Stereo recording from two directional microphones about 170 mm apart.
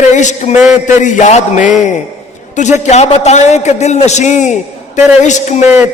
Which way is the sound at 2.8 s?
45° left (ahead or behind).